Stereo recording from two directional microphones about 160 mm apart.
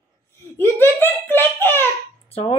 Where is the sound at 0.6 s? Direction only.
15° left (ahead or behind).